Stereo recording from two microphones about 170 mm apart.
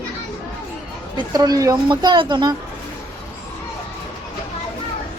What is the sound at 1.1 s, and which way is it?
Speech, 25° right (ahead or behind).